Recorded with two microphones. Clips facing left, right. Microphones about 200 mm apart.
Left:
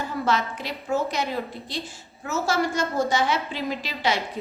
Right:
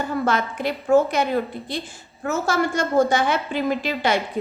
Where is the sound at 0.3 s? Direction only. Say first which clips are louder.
Right 3 dB; 55° right (ahead or behind).